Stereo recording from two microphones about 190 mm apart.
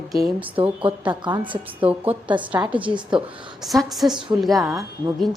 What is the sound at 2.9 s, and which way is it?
Speech, 25° right (ahead or behind).